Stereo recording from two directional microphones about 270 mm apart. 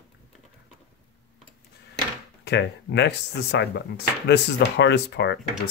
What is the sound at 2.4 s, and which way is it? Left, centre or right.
Speech, left.